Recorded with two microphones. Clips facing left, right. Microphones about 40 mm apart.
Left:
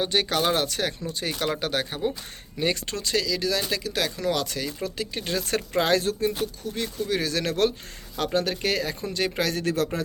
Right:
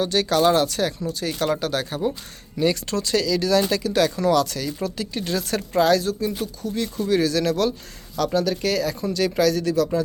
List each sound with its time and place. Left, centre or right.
0.0 s speech: left; by 4.1 s centre
4.3 s speech: centre; by 6.5 s left
7.0 s speech: centre
7.3 s speech: left
9.6 s speech: left